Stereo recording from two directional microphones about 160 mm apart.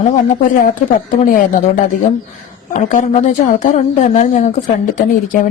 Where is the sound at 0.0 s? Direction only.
60° left (ahead or behind).